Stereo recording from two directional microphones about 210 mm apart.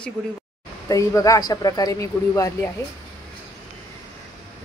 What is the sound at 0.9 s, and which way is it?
Speech, 15° left (ahead or behind).